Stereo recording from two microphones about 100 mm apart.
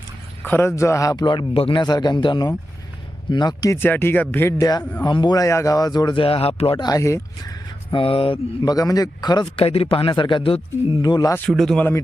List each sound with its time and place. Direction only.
0.4 s speech: 20° left (ahead or behind)
1.2 s a man's voice: 50° left (ahead or behind)
1.5 s a man's voice: 70° left (ahead or behind)
1.8 s a man's voice: 45° left (ahead or behind)
3.7 s speech: 20° left (ahead or behind)
5.0 s speech: 45° left (ahead or behind)
6.1 s a man's voice: 70° left (ahead or behind)
6.7 s a man's voice: 40° left (ahead or behind)
7.0 s speech: 30° left (ahead or behind)
7.9 s mantra: 60° left (ahead or behind)
8.6 s speech: 35° left (ahead or behind)
9.6 s a man's voice: 75° left (ahead or behind); by 10.6 s 60° left (ahead or behind)
11.0 s speech: 40° left (ahead or behind)
11.5 s speech: 5° left (ahead or behind)